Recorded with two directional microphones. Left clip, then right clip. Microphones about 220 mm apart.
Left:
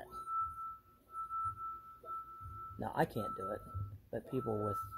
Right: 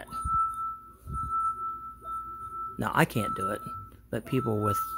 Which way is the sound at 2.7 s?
30° right (ahead or behind).